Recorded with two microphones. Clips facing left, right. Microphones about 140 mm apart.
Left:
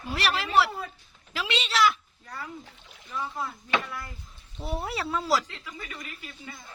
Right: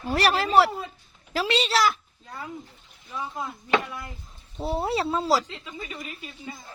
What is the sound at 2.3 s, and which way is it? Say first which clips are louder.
Speech: right 2 dB; 20° right (ahead or behind).